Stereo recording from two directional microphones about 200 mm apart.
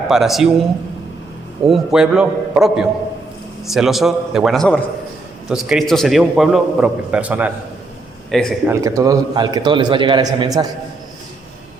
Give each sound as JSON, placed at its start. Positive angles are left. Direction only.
{"t": 0.1, "sound": "a man's voice", "side_deg": 0}
{"t": 1.6, "sound": "a man's voice", "side_deg": 0}
{"t": 8.6, "sound": "a man's voice", "side_deg": -15}